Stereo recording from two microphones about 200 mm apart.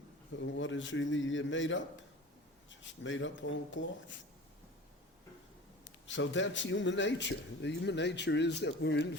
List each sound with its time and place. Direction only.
0.3 s a man's voice: 70° left (ahead or behind)
6.1 s speech: 65° left (ahead or behind)